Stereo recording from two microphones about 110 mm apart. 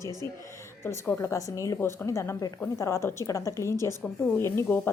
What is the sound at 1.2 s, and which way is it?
A woman's voice, 30° left (ahead or behind).